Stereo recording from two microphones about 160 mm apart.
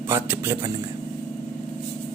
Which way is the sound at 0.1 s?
15° right (ahead or behind).